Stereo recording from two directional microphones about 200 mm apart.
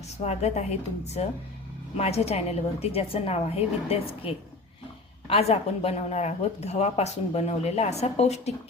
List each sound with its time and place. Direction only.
0.3 s a woman's voice: 35° left (ahead or behind)